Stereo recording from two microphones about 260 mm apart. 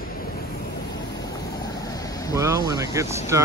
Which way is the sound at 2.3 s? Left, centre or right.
Centre.